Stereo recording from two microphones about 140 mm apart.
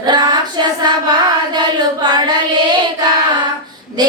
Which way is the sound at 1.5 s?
30° right (ahead or behind).